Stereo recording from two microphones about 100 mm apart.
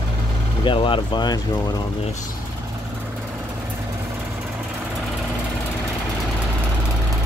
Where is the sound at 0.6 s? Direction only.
55° left (ahead or behind).